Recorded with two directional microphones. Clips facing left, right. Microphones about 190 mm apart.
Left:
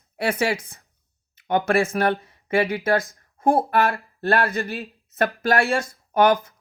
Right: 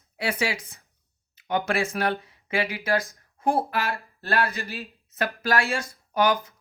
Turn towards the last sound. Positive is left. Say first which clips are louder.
# left 5 dB
turn(degrees=55)  # may be behind; listen again after turning